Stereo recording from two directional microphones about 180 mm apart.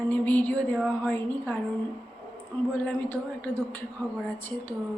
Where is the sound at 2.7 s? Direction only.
10° left (ahead or behind).